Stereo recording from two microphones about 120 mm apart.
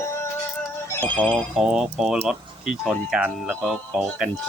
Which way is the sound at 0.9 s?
15° left (ahead or behind).